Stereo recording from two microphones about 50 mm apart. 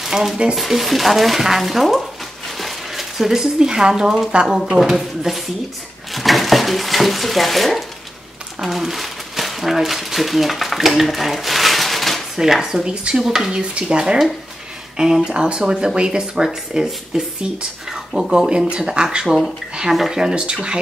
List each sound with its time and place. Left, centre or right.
0.0 s speech: centre
12.8 s speech: centre
13.6 s speech: centre